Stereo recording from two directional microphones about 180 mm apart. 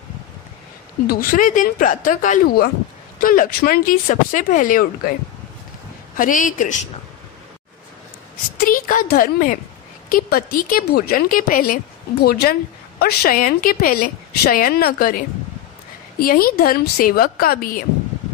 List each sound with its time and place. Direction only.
1.0 s speech: 55° left (ahead or behind)
6.1 s speech: 50° left (ahead or behind)
8.6 s speech: 50° left (ahead or behind)